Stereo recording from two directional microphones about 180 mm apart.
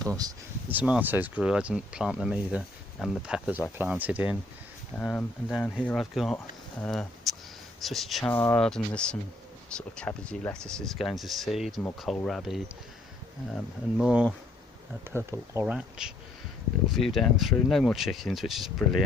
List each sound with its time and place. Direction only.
0.0 s speech: 20° right (ahead or behind)
0.7 s speech: 10° right (ahead or behind)
4.9 s speech: 10° left (ahead or behind)
8.3 s speech: 10° left (ahead or behind)
14.0 s speech: 5° right (ahead or behind)
15.6 s speech: 5° right (ahead or behind)